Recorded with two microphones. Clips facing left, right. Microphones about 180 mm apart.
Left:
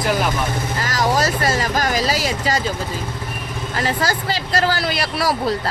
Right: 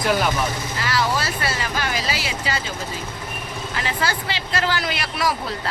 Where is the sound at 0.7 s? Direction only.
45° left (ahead or behind).